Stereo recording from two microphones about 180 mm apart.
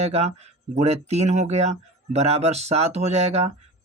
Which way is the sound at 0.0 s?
35° right (ahead or behind).